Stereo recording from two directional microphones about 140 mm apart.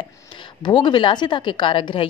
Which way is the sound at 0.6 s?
35° left (ahead or behind).